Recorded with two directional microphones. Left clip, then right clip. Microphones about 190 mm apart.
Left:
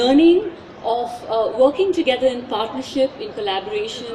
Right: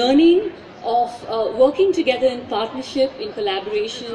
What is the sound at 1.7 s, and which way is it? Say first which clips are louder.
A woman's voice: right 1 dB; 45° left (ahead or behind).